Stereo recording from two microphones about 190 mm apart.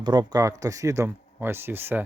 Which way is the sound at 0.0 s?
25° right (ahead or behind).